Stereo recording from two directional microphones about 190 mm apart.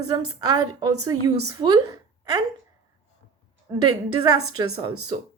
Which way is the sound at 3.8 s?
20° right (ahead or behind).